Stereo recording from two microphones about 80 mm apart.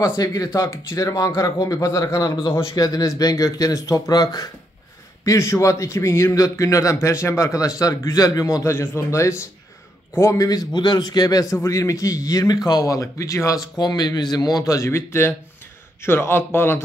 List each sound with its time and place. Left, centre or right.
0.1 s speech: left
0.5 s a man's voice: left
5.2 s a man's voice: left
7.5 s speech: left
8.7 s a man's voice: left
10.7 s a man's voice: left
11.5 s a man's voice: left
13.7 s a man's voice: left